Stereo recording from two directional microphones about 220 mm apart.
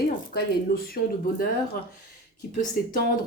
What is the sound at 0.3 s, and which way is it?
Speech, 45° left (ahead or behind).